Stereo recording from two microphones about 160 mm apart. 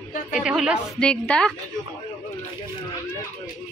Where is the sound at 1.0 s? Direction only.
5° left (ahead or behind).